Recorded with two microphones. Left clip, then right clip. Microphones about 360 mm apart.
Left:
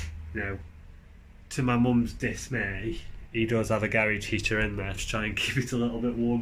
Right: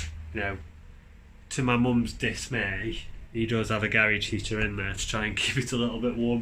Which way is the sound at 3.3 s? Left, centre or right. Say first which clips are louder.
Left 2 dB; centre.